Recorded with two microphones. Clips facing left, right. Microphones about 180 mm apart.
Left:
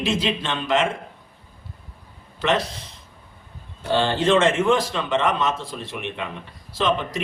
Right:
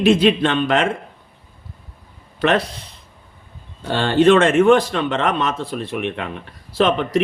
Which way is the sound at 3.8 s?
60° right (ahead or behind).